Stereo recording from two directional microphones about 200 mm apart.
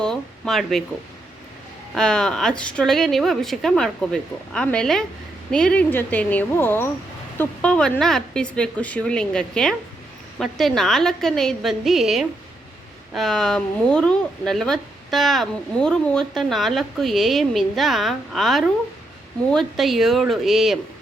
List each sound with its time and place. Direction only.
0.0 s speech: centre (ahead or behind)
2.0 s a woman's voice: 5° left (ahead or behind)